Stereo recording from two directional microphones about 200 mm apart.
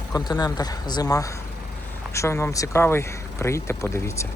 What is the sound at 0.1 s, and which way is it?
Speech, 20° left (ahead or behind).